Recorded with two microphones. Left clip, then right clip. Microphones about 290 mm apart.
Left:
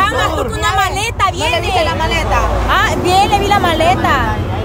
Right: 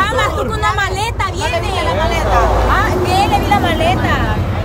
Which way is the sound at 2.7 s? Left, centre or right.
Left.